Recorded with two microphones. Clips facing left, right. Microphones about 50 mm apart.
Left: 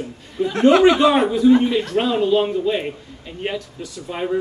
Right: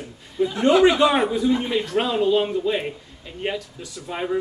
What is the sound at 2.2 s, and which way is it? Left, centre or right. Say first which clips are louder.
Speech: left 2 dB; centre.